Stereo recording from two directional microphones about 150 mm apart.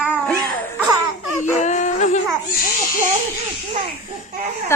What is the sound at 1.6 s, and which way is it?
Music, 55° left (ahead or behind).